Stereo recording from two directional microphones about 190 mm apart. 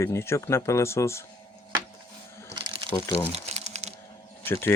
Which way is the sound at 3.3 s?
35° right (ahead or behind).